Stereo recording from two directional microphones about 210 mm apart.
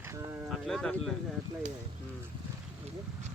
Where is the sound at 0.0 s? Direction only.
10° right (ahead or behind).